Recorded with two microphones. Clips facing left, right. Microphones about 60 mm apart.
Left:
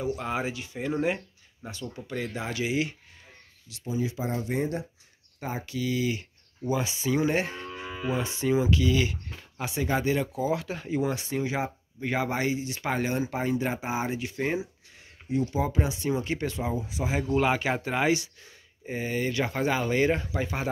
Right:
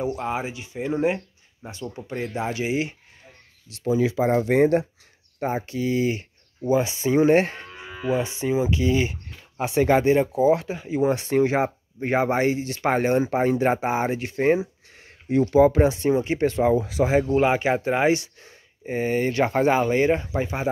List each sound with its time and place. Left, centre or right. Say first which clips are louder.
0.2 s speech: right 3 dB; centre
3.8 s speech: right 9 dB; right
5.4 s speech: right 7 dB; right
8.0 s speech: right 5 dB; right
8.7 s speech: right 3 dB; right
9.8 s speech: right 9 dB; right
10.0 s speech: right 9 dB; right
10.7 s speech: right 3 dB; centre
11.1 s speech: right 9 dB; right
15.6 s speech: right 11 dB; right
16.1 s speech: right 7 dB; right
16.4 s speech: right 11 dB; right
16.7 s speech: right 10 dB; right
17.3 s speech: right 5 dB; right